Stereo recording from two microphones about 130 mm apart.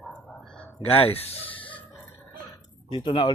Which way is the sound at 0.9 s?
45° left (ahead or behind).